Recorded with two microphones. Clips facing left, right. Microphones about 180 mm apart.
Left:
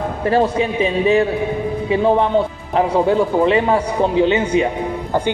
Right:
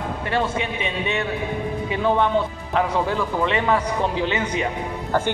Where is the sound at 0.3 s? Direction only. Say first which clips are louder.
Left 8 dB; 35° left (ahead or behind).